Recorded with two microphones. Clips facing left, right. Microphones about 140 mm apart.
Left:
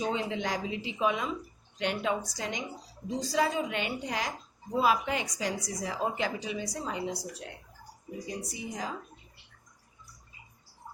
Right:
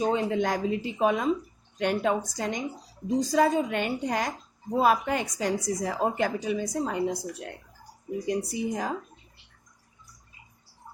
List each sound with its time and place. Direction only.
0.0 s a woman's voice: 50° right (ahead or behind)